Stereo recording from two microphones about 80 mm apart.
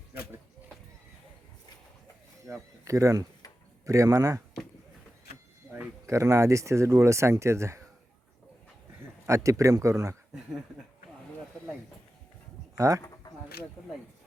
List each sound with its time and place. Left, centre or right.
2.5 s speech: right
6.1 s speech: right
9.2 s speech: right
12.7 s speech: right